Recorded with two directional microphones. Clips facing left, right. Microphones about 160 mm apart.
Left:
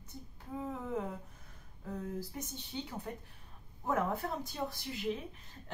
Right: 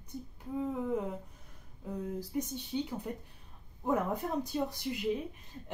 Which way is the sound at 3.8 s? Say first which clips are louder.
Right 2 dB; 15° right (ahead or behind).